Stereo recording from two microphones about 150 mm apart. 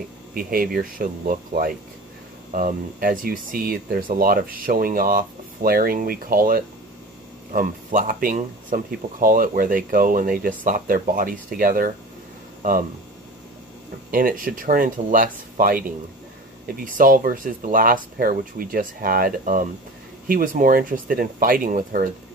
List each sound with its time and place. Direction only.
0.3 s speech: 70° right (ahead or behind)
14.1 s speech: 70° right (ahead or behind)